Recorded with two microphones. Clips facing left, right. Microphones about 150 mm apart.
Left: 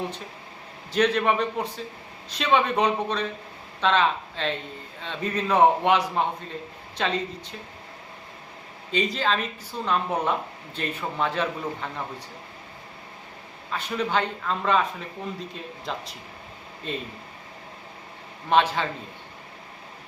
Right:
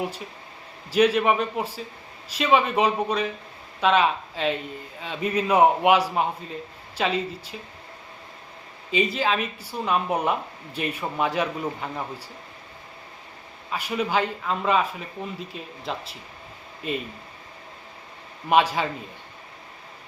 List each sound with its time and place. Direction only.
0.9 s a man's voice: 10° right (ahead or behind)
8.9 s speech: 5° right (ahead or behind)
13.7 s a man's voice: 10° right (ahead or behind)
18.4 s speech: 10° right (ahead or behind)